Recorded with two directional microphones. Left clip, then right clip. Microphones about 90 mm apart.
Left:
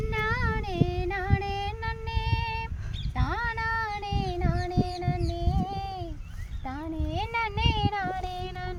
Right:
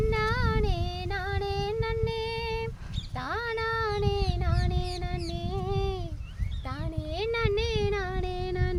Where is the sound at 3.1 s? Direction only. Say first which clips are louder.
Left 1 dB; 55° right (ahead or behind).